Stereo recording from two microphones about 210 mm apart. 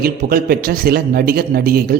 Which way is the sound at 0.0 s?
45° right (ahead or behind).